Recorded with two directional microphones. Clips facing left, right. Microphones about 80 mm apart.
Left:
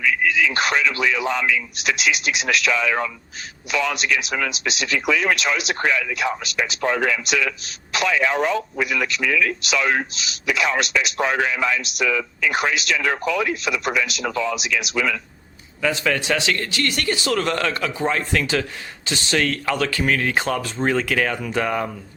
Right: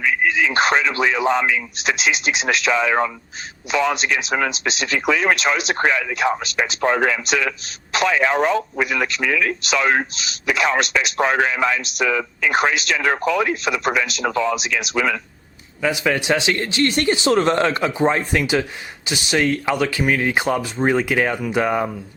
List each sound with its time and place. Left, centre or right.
0.0 s speech: right
15.8 s speech: centre